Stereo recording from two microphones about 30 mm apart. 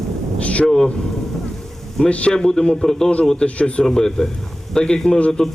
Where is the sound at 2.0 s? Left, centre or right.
Left.